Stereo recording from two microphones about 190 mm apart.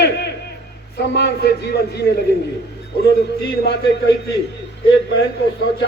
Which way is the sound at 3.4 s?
65° left (ahead or behind).